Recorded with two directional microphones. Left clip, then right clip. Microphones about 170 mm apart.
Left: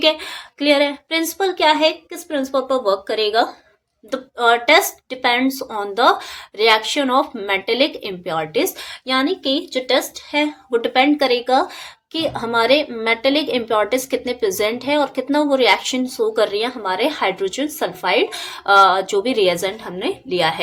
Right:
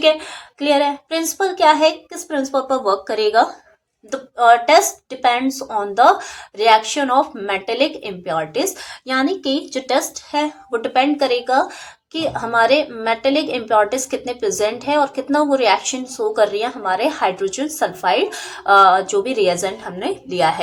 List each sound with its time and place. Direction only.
0.0 s a woman's voice: 30° left (ahead or behind); by 3.4 s 10° left (ahead or behind)
4.1 s a woman's voice: 25° left (ahead or behind)
10.3 s a woman's voice: 30° left (ahead or behind)